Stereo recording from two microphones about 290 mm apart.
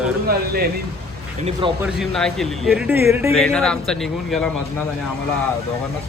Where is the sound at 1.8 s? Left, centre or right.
Centre.